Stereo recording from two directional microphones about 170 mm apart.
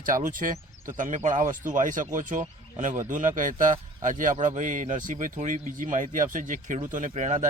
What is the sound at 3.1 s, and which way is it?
A man's voice, 50° right (ahead or behind).